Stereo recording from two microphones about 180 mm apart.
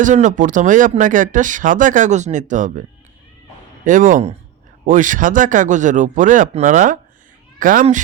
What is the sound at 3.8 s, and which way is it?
Speech, 45° right (ahead or behind).